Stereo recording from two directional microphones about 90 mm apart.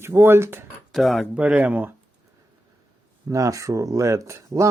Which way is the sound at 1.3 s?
15° right (ahead or behind).